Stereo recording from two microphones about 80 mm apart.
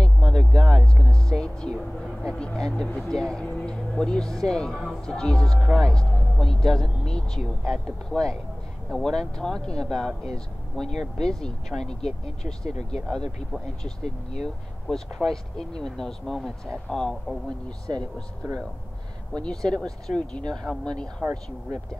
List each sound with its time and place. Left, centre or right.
0.0 s a sound: centre
3.0 s speech: centre
19.3 s speech: centre